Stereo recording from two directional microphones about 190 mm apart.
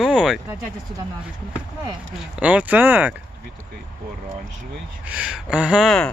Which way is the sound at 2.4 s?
5° right (ahead or behind).